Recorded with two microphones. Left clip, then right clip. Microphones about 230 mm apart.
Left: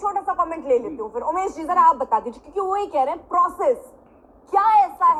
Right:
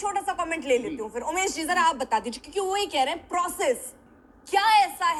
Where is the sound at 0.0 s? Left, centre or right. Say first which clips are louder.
Left 5 dB; right.